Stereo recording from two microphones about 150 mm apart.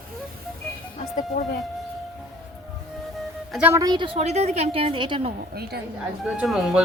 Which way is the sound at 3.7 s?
25° right (ahead or behind).